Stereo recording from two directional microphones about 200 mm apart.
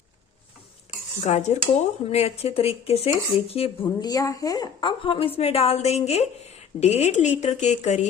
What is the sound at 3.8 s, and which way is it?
A woman's voice, 15° left (ahead or behind).